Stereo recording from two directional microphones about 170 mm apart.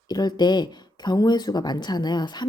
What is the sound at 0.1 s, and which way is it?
Speech, 25° left (ahead or behind).